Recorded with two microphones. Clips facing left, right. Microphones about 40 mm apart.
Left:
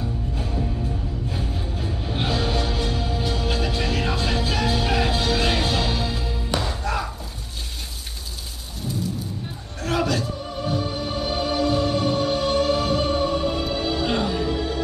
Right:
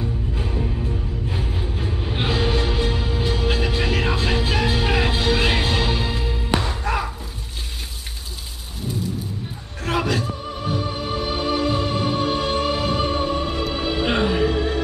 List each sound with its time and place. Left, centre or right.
0.4 s music: right
9.8 s music: centre; by 14.8 s right